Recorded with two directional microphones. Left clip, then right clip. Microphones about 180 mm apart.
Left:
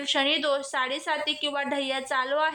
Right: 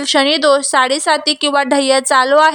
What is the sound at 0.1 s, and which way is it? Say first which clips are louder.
A woman's voice: right 13 dB; 45° right (ahead or behind).